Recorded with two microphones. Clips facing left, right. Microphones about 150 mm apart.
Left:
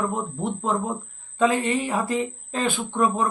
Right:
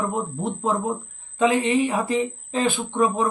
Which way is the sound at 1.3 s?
20° right (ahead or behind).